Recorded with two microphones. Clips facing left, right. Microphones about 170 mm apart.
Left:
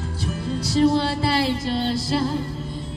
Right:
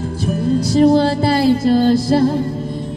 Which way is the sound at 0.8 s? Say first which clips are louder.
Right 6 dB; 45° right (ahead or behind).